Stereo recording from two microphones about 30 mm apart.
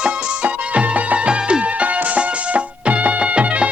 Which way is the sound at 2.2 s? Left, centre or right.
Right.